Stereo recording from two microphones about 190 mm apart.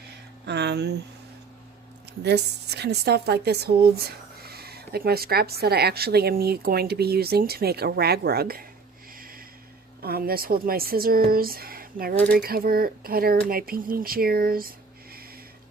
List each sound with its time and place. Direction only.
0.4 s speech: 60° right (ahead or behind)
2.2 s speech: 60° right (ahead or behind)
9.1 s a sound: 50° right (ahead or behind)
10.0 s speech: 55° right (ahead or behind)